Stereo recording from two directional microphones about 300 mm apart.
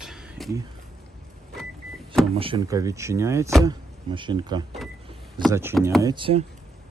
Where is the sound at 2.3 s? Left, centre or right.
Centre.